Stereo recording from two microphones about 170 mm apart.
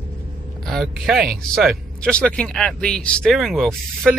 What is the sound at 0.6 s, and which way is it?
Speech, centre (ahead or behind).